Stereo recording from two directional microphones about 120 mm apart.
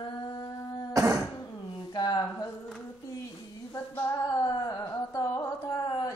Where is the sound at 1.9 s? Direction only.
35° left (ahead or behind).